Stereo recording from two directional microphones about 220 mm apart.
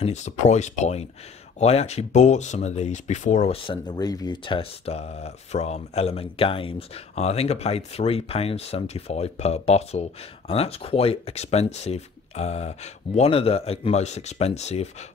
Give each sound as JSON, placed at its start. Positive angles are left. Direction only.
{"t": 0.0, "sound": "speech", "side_deg": 30}